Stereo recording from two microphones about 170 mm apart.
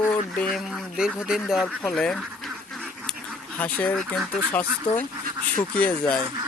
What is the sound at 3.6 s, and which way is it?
Speech, 10° left (ahead or behind).